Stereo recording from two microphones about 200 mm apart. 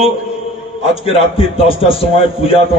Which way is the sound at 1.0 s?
25° left (ahead or behind).